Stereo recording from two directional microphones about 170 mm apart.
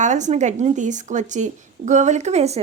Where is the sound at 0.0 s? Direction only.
45° right (ahead or behind).